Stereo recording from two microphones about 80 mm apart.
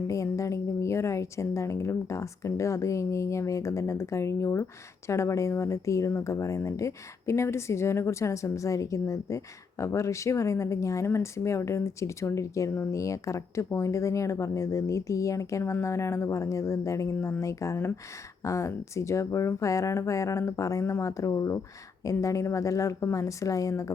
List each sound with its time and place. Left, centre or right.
0.1 s speech: left